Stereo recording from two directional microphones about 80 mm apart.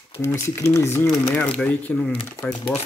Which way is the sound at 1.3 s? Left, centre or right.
Centre.